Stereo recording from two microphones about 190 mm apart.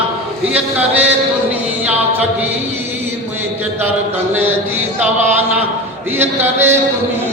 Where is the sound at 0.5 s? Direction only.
5° right (ahead or behind).